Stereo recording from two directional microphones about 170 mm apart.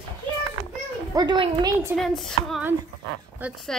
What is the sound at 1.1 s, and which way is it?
Speech, 25° right (ahead or behind).